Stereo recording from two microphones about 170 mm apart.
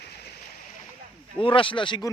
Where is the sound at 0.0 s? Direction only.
70° left (ahead or behind).